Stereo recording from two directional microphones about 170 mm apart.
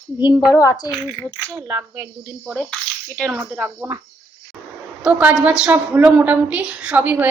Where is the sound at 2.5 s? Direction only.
10° left (ahead or behind).